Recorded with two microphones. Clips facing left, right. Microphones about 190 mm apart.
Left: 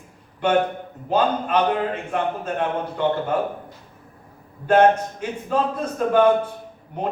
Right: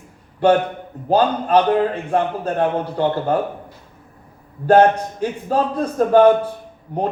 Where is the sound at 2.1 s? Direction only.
35° right (ahead or behind).